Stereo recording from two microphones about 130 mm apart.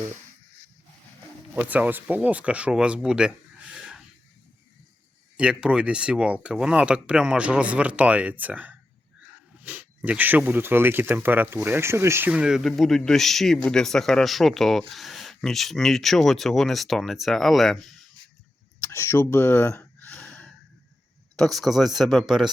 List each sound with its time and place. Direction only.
1.5 s speech: 10° right (ahead or behind)
5.4 s speech: 5° right (ahead or behind)
18.8 s speech: 20° left (ahead or behind)
20.1 s gasp: 5° left (ahead or behind)
21.3 s speech: centre (ahead or behind)